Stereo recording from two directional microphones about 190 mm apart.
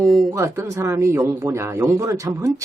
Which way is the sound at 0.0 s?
Centre (ahead or behind).